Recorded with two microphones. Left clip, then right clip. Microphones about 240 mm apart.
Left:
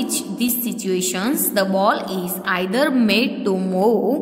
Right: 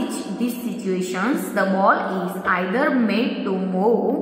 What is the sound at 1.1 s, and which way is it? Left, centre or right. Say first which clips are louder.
A woman's voice: left 1 dB; left.